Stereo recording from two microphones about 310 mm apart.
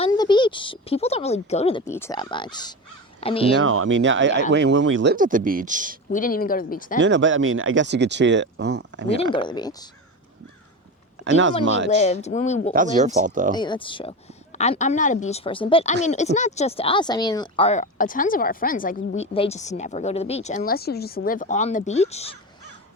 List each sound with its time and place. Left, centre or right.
0.0 s speech: centre
1.9 s speech: centre
3.5 s speech: right
5.1 s speech: right
6.1 s speech: left
7.0 s speech: right
9.0 s speech: centre
11.3 s speech: right
11.9 s speech: left
12.7 s speech: right
13.5 s speech: centre